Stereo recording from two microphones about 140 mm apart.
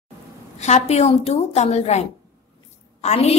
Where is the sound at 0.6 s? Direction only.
55° left (ahead or behind).